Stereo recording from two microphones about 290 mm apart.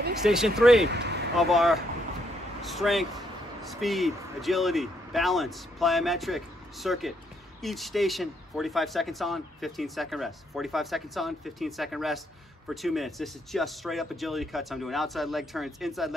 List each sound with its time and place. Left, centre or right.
0.2 s speech: centre
0.8 s speech: right
1.5 s speech: centre